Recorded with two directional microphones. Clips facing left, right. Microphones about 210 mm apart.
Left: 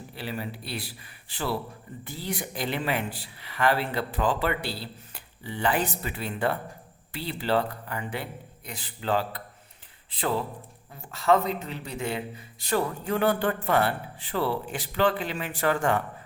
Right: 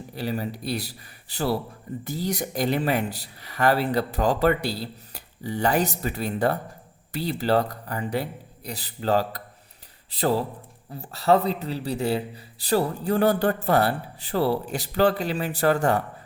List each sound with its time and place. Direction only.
0.1 s a man's voice: 40° right (ahead or behind)